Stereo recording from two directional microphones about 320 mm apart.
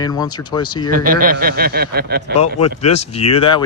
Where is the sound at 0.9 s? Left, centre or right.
Right.